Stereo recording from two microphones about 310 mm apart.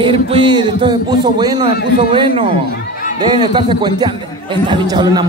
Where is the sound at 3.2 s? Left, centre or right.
Centre.